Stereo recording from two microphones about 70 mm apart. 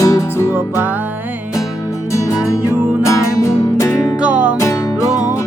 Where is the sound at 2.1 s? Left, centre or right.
Left.